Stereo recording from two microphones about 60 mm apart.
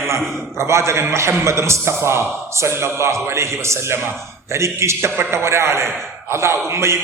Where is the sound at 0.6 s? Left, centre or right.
Right.